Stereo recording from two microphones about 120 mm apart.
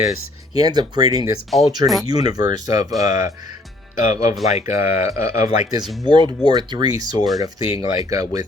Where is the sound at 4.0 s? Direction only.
90° left.